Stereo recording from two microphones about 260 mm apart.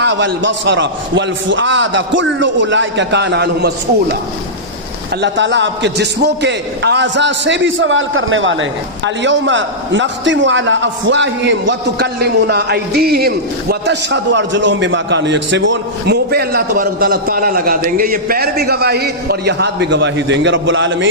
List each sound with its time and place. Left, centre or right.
0.0 s a man's voice: right
5.2 s a man's voice: right